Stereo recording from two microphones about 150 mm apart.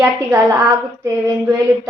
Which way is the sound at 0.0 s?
10° right (ahead or behind).